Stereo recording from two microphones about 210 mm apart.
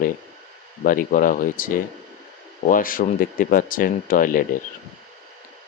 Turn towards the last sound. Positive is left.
turn(degrees=40)  # may be behind; listen again after turning